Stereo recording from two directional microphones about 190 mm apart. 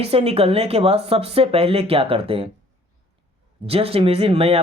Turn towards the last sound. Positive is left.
turn(degrees=-30)  # may be behind; listen again after turning